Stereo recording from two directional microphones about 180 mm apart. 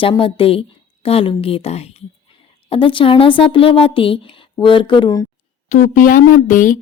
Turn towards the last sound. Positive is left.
turn(degrees=45)  # may be behind; listen again after turning